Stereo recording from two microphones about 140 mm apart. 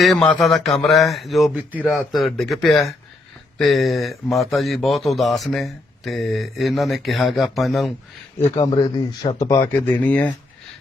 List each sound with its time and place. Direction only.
0.0 s speech: 5° left (ahead or behind)
1.8 s a man's voice: 15° left (ahead or behind)
2.1 s speech: centre (ahead or behind)
8.6 s speech: 30° left (ahead or behind); by 10.3 s 10° left (ahead or behind)